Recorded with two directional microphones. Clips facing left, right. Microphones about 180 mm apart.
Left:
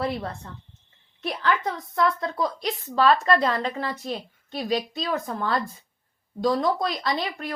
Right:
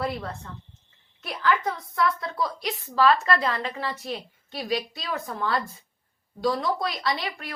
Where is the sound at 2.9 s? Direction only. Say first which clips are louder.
Left 1 dB; 25° left (ahead or behind).